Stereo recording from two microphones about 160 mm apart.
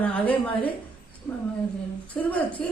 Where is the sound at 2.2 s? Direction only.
5° left (ahead or behind).